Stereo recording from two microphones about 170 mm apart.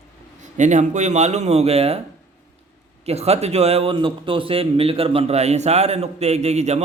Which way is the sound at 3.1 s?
40° right (ahead or behind).